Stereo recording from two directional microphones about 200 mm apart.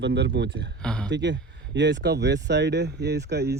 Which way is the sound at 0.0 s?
60° right (ahead or behind).